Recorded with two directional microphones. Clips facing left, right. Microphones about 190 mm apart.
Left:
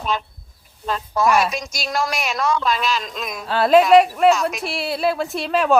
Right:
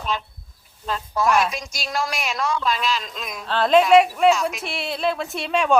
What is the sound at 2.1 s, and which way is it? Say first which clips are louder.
Speech: left 3 dB; 45° left (ahead or behind).